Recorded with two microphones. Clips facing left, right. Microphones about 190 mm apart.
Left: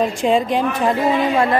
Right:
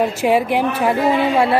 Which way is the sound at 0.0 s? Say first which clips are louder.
Right 1 dB; 10° right (ahead or behind).